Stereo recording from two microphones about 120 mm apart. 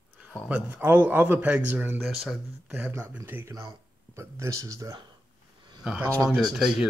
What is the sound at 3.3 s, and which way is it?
Speech, 20° right (ahead or behind).